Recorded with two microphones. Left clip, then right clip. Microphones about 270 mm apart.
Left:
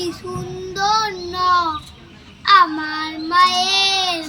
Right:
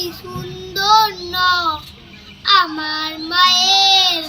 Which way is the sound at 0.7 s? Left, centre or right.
Centre.